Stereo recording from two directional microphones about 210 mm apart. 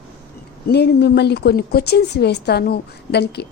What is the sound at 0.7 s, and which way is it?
A woman's voice, 50° left (ahead or behind).